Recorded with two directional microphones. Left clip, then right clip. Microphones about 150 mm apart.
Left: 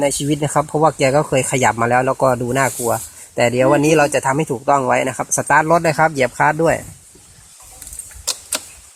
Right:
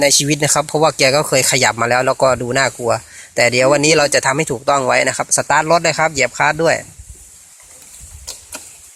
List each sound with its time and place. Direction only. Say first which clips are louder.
0.0 s speech: right 5 dB; 25° right (ahead or behind); by 6.8 s centre (ahead or behind)